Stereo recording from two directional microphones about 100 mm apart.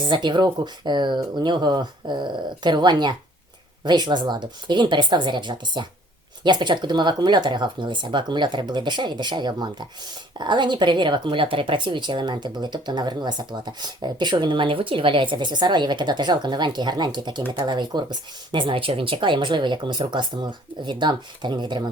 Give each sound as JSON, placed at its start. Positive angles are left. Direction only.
{"t": 0.0, "sound": "a woman's voice", "side_deg": -50}